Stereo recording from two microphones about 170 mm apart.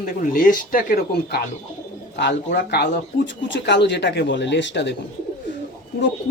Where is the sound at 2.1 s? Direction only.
80° left.